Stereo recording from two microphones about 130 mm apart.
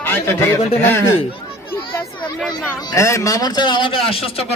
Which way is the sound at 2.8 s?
25° left (ahead or behind).